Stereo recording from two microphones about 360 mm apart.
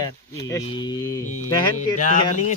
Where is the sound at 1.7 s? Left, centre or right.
Left.